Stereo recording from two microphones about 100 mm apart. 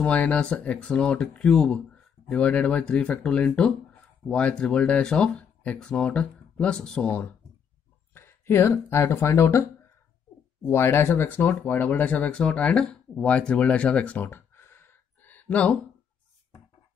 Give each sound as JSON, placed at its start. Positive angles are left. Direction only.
{"t": 0.0, "sound": "speech", "side_deg": 15}
{"t": 8.1, "sound": "speech", "side_deg": 25}